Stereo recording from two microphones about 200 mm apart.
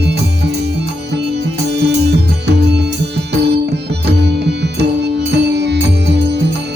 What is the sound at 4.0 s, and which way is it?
Music, 60° right (ahead or behind).